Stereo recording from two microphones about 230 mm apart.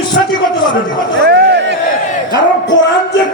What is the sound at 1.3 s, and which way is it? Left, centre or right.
Speech, right.